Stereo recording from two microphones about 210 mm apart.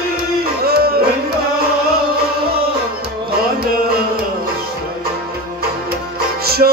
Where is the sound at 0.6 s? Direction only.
45° right (ahead or behind).